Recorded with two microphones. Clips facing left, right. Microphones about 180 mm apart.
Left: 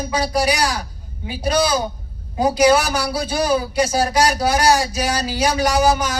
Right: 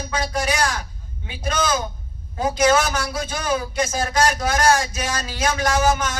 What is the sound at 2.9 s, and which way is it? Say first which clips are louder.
Speech: left 4 dB; 35° left (ahead or behind).